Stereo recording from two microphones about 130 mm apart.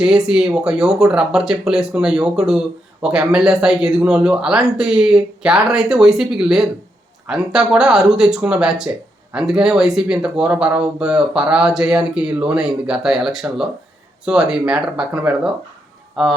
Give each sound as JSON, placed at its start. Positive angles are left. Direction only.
{"t": 0.0, "sound": "speech", "side_deg": -5}